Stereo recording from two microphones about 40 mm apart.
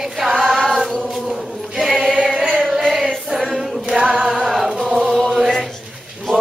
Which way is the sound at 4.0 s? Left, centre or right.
Centre.